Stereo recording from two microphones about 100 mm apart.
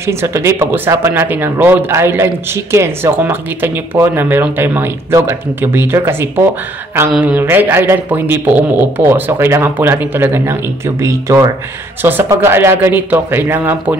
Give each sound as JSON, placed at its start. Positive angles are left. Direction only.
{"t": 0.0, "sound": "speech", "side_deg": -25}
{"t": 12.0, "sound": "speech", "side_deg": -20}